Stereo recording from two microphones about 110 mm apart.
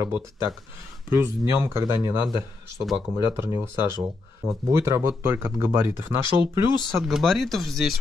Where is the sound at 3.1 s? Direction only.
30° right (ahead or behind).